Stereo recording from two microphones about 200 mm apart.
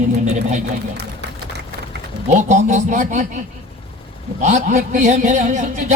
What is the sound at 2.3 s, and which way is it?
Speech, 35° right (ahead or behind).